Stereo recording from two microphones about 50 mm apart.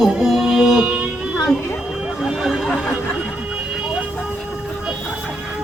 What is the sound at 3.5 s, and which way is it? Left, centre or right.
Vehicle, centre.